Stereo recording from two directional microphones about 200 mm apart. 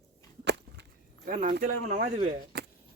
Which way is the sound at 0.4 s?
60° right (ahead or behind).